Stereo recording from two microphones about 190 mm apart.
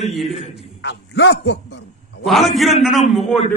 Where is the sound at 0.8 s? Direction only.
70° left (ahead or behind).